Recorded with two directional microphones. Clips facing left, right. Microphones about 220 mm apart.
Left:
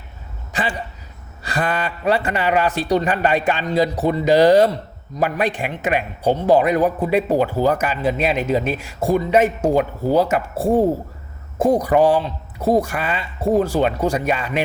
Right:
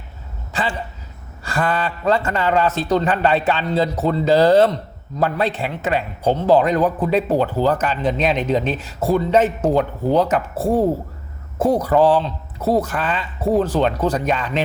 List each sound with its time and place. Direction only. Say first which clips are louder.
0.5 s a man's voice: even; 15° left (ahead or behind)